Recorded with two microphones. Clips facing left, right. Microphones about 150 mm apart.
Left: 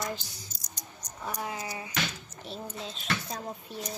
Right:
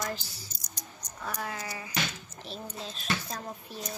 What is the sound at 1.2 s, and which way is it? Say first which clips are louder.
Speech: left 1 dB; 20° left (ahead or behind).